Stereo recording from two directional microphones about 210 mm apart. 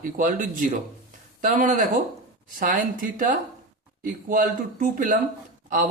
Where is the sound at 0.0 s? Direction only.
40° right (ahead or behind).